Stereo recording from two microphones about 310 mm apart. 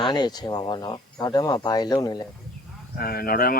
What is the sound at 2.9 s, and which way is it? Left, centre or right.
Speech, left.